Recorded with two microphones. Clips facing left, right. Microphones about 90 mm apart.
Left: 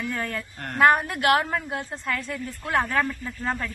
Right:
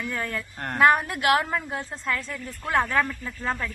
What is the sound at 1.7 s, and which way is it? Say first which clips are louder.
A woman's voice: even; 10° left (ahead or behind).